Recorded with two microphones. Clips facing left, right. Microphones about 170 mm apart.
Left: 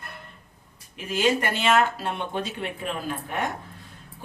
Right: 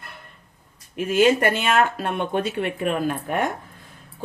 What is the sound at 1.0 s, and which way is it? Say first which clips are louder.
Speech: right 6 dB; 55° right (ahead or behind).